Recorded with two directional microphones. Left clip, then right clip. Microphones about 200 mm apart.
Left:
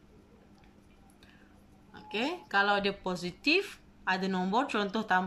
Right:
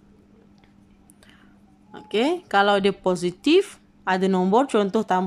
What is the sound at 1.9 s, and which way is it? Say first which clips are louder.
Speech: right 11 dB; 40° right (ahead or behind).